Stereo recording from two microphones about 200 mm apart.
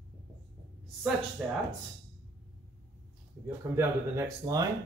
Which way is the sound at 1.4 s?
Centre (ahead or behind).